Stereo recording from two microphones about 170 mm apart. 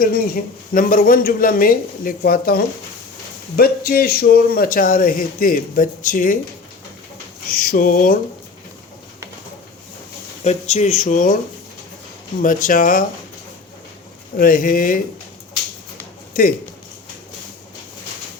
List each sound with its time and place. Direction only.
0.0 s a man's voice: 55° left (ahead or behind)
7.4 s a man's voice: 55° left (ahead or behind)
10.4 s speech: 40° left (ahead or behind)
12.4 s speech: 50° left (ahead or behind)
14.3 s a man's voice: 55° left (ahead or behind)
16.4 s speech: 55° left (ahead or behind)